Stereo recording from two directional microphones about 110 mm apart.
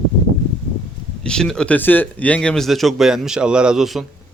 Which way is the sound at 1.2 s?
5° left (ahead or behind).